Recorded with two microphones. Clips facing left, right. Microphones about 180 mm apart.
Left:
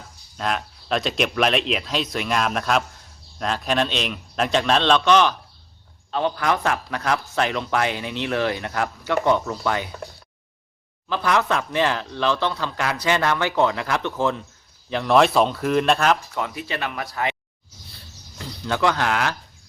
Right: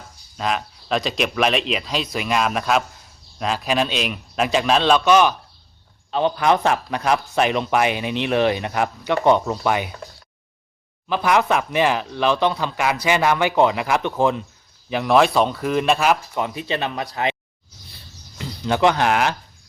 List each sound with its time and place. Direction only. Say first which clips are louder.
0.3 s speech: right 2 dB; centre (ahead or behind)
6.1 s speech: right 4 dB; 20° right (ahead or behind)
11.1 s speech: right 3 dB; 15° right (ahead or behind)
16.3 s speech: right 4 dB; 20° right (ahead or behind)
18.3 s speech: right 4 dB; 20° right (ahead or behind)